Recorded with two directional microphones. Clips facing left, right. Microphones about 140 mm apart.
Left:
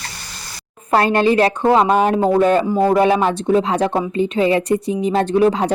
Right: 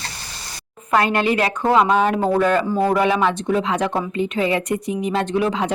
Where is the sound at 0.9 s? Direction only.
35° left (ahead or behind).